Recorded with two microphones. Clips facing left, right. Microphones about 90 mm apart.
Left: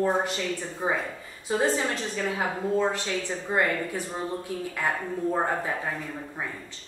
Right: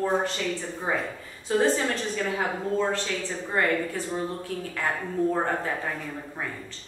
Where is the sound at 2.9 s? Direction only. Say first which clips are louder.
Right 1 dB; 15° left (ahead or behind).